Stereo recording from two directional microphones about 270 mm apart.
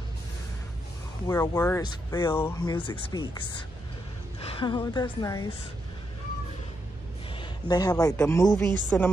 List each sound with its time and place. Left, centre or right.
1.2 s speech: centre
7.3 s a woman's voice: centre